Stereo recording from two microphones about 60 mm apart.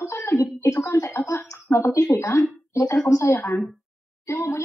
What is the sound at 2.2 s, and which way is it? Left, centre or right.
Speech, left.